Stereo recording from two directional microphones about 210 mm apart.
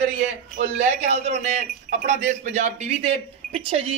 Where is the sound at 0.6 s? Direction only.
30° right (ahead or behind).